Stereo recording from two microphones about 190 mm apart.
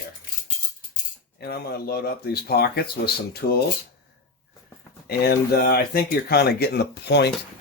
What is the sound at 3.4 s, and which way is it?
Speech, 45° left (ahead or behind).